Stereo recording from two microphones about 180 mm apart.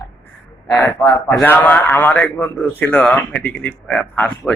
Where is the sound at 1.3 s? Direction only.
10° left (ahead or behind).